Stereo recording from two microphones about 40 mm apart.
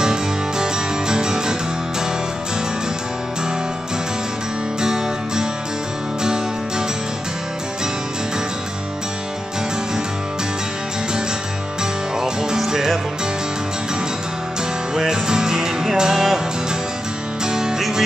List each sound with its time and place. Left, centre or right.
0.0 s music: centre
4.8 s music: centre
12.2 s music: centre
15.0 s music: centre
17.5 s music: centre